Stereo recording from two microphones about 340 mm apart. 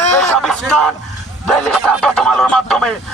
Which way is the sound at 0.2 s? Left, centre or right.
Centre.